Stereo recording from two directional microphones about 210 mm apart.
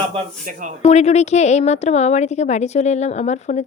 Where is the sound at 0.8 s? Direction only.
30° left (ahead or behind).